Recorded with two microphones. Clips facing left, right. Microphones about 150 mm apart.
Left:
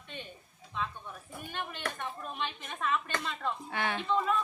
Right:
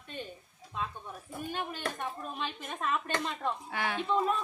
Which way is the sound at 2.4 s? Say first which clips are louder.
Even; 40° right (ahead or behind).